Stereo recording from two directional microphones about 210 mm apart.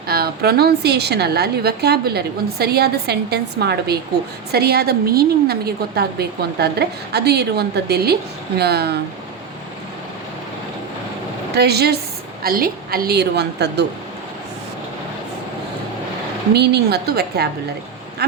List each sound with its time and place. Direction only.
0.1 s a woman's voice: 45° right (ahead or behind)
11.5 s a woman's voice: 50° right (ahead or behind)
16.5 s a woman's voice: 50° right (ahead or behind)
18.2 s quack: 50° right (ahead or behind)